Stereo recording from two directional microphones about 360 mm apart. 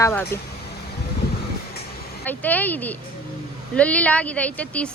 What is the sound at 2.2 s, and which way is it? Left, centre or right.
Speech, centre.